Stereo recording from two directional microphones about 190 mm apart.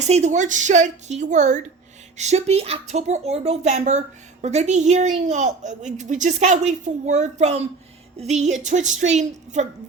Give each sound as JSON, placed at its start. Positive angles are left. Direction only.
{"t": 0.1, "sound": "speech", "side_deg": -35}